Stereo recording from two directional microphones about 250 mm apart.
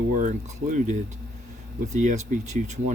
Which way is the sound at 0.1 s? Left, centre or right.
Right.